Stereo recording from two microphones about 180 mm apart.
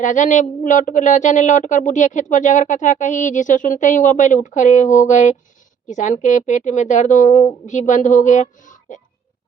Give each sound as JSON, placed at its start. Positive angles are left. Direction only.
{"t": 0.0, "sound": "a woman's voice", "side_deg": 45}